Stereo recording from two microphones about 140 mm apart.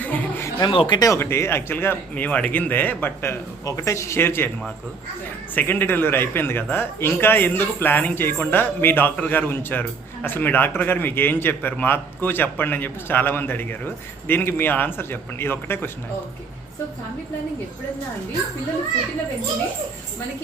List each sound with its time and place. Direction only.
0.0 s a sound: 10° left (ahead or behind)
0.7 s a man's voice: 35° left (ahead or behind); by 4.4 s 15° left (ahead or behind)
5.5 s a man's voice: 15° left (ahead or behind)